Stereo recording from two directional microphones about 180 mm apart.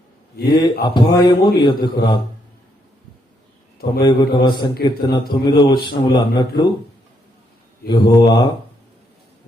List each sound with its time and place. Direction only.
0.4 s a man's voice: 25° left (ahead or behind)
4.0 s a man's voice: 25° left (ahead or behind)
7.9 s a man's voice: 25° left (ahead or behind)